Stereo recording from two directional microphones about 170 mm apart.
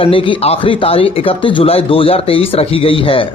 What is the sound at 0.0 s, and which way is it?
Speech, 30° left (ahead or behind).